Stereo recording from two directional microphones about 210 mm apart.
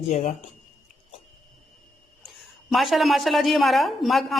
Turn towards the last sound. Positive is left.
turn(degrees=0)  # may be behind; listen again after turning